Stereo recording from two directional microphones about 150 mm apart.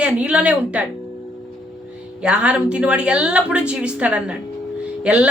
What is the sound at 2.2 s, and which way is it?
Speech, 5° right (ahead or behind).